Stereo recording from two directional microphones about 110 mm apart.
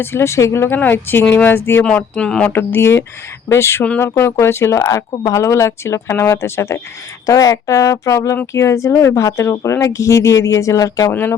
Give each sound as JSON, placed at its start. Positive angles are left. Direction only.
{"t": 0.0, "sound": "speech", "side_deg": 20}
{"t": 1.8, "sound": "speech", "side_deg": 10}
{"t": 2.5, "sound": "speech", "side_deg": 20}
{"t": 11.1, "sound": "speech", "side_deg": 20}